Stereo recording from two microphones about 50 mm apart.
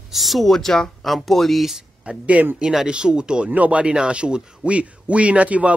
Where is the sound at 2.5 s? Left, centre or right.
Centre.